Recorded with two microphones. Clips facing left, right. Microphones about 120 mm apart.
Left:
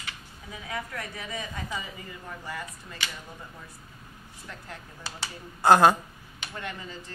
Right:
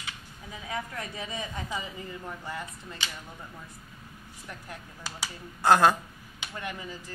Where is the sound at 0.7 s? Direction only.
20° right (ahead or behind).